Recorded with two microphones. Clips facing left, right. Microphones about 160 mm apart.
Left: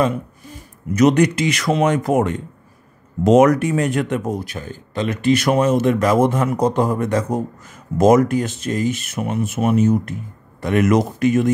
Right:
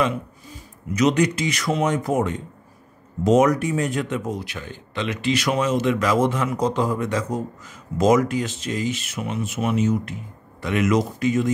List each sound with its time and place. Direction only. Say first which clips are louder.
0.9 s a man's voice: left 5 dB; 55° left (ahead or behind)